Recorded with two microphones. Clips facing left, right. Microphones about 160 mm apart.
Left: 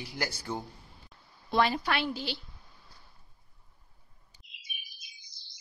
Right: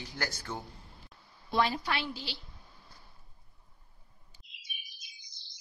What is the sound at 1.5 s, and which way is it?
Speech, 70° left (ahead or behind).